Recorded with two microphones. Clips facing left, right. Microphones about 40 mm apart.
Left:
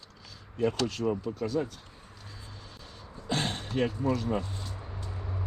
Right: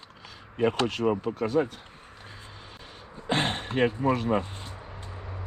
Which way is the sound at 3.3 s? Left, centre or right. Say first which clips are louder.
Right 4 dB; right.